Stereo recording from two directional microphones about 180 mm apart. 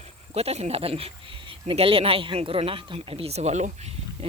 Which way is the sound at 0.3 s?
35° right (ahead or behind).